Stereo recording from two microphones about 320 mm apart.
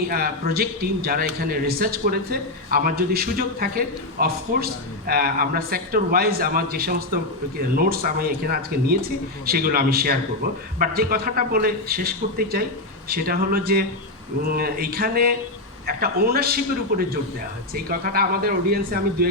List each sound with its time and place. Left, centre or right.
0.1 s a man's voice: right